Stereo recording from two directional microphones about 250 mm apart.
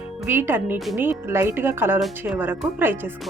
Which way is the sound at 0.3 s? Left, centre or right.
Centre.